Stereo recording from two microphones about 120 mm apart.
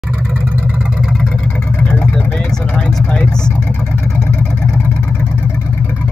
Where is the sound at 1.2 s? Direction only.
10° left (ahead or behind).